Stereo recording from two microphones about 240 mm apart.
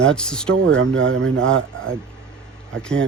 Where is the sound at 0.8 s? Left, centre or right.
Right.